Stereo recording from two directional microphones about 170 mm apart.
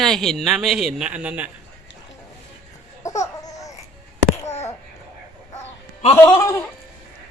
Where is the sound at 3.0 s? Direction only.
20° left (ahead or behind).